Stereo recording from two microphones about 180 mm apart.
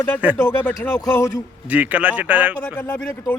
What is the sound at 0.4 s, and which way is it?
Speech, 15° left (ahead or behind).